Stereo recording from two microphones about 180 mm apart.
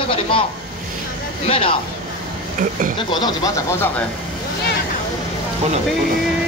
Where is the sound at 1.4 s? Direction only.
30° left (ahead or behind).